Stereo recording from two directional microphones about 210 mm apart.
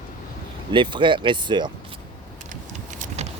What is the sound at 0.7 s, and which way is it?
Speech, 20° right (ahead or behind).